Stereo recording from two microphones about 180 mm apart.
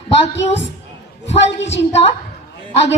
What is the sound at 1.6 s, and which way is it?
Speech, 80° left.